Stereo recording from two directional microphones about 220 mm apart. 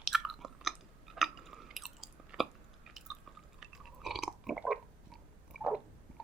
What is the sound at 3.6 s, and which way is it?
Chewing, centre (ahead or behind).